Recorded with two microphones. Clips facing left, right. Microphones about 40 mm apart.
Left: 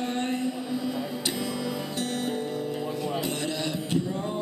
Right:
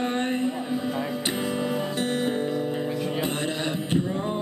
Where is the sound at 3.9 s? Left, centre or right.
Right.